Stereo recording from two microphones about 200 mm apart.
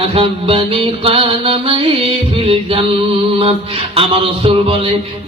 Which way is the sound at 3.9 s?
25° right (ahead or behind).